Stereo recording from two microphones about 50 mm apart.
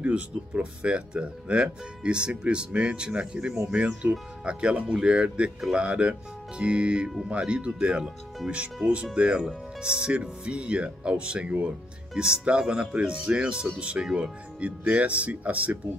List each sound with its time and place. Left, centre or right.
0.0 s speech: right